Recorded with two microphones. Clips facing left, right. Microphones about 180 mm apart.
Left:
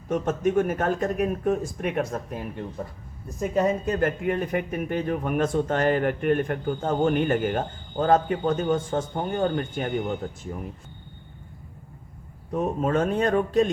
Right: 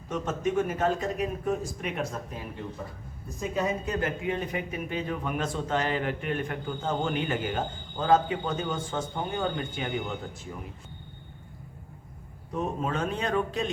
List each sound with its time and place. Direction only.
0.1 s speech: 50° left (ahead or behind)
12.5 s speech: 50° left (ahead or behind)